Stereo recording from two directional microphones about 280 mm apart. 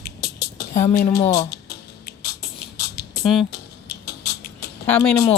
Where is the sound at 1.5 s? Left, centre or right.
Left.